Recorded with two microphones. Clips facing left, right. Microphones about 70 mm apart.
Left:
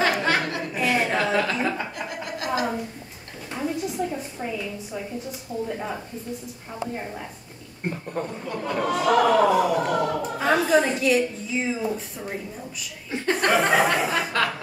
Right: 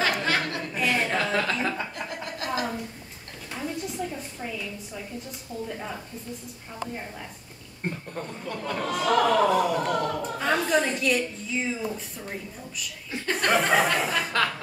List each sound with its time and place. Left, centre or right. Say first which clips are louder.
0.2 s a sound: left 3 dB; centre
1.6 s chuckle: left 3 dB; centre
3.5 s a sound: left 5 dB; centre
5.7 s speech: left 4 dB; centre
7.9 s speech: left 5 dB; centre
13.3 s chuckle: left 2 dB; centre